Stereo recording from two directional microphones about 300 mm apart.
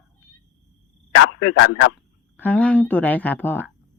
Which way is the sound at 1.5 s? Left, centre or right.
Left.